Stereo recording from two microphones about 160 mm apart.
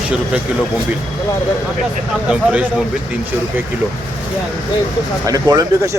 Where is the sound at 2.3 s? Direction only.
5° right (ahead or behind).